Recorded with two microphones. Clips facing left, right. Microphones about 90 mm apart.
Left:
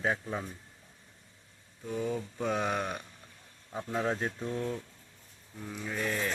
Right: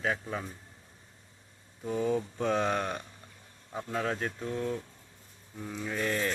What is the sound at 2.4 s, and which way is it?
Speech, 5° left (ahead or behind).